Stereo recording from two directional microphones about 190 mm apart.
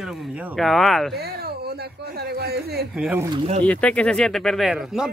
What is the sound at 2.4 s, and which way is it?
Speech, 55° right (ahead or behind).